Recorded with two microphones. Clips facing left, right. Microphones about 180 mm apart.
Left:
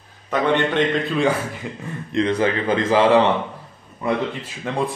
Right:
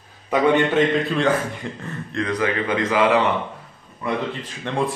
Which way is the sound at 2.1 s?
25° left (ahead or behind).